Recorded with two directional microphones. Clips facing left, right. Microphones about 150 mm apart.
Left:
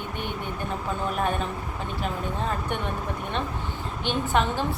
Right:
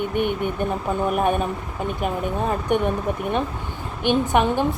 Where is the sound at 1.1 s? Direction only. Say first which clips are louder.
Right 6 dB; 15° right (ahead or behind).